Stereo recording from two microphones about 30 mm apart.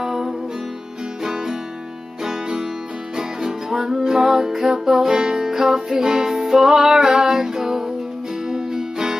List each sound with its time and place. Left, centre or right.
0.0 s music: centre
3.2 s music: right